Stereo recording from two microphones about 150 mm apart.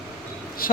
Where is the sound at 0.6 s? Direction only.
75° left (ahead or behind).